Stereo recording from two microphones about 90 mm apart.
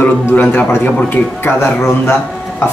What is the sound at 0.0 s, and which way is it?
Speech, 20° left (ahead or behind).